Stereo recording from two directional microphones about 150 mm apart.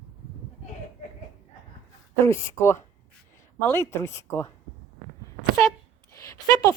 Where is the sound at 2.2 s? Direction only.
15° left (ahead or behind).